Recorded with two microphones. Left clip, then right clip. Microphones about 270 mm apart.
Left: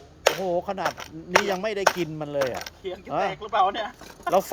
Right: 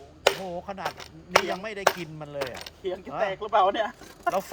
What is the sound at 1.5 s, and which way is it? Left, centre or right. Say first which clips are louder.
Speech: left 3 dB; left.